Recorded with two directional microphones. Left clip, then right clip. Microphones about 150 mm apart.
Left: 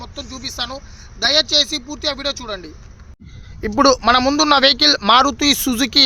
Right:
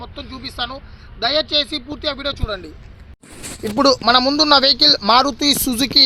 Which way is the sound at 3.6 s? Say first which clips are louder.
Left 1 dB; 10° left (ahead or behind).